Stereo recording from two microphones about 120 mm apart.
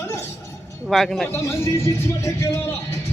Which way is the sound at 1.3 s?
20° left (ahead or behind).